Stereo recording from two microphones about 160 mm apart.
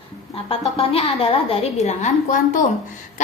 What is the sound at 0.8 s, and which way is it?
A woman's voice, 40° left (ahead or behind).